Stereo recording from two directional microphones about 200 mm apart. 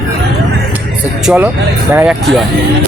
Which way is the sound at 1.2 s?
10° right (ahead or behind).